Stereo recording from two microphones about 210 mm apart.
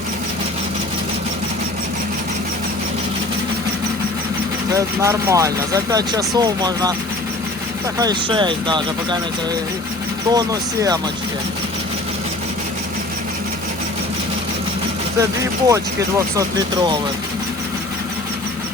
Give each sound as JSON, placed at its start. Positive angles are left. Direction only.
{"t": 4.7, "sound": "speech", "side_deg": -15}
{"t": 7.9, "sound": "speech", "side_deg": -20}
{"t": 10.2, "sound": "speech", "side_deg": -15}
{"t": 15.2, "sound": "speech", "side_deg": -15}